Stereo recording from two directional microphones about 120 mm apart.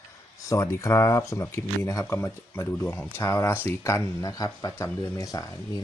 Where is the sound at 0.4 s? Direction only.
25° left (ahead or behind).